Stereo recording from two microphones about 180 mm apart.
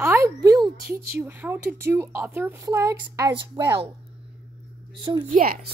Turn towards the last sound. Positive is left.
turn(degrees=-50)  # may be behind; listen again after turning